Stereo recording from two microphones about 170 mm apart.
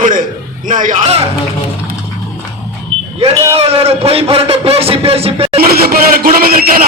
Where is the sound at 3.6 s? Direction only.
35° right (ahead or behind).